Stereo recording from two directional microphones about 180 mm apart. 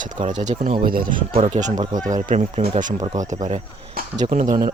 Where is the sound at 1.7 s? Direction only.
25° right (ahead or behind).